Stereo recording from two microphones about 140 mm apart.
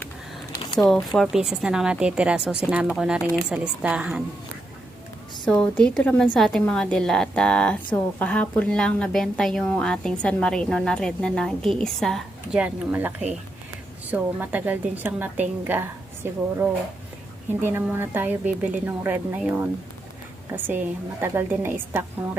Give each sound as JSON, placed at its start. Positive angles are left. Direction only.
{"t": 0.6, "sound": "a sound", "side_deg": 35}
{"t": 1.1, "sound": "a woman's voice", "side_deg": 0}
{"t": 5.5, "sound": "a woman's voice", "side_deg": 5}
{"t": 12.6, "sound": "a woman's voice", "side_deg": -15}